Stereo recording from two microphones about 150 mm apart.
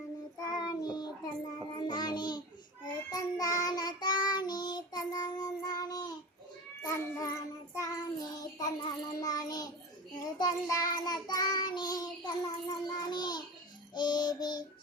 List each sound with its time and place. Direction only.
0.4 s child singing: 25° left (ahead or behind)